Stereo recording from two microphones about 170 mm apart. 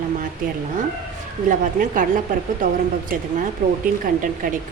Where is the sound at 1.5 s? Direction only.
50° right (ahead or behind).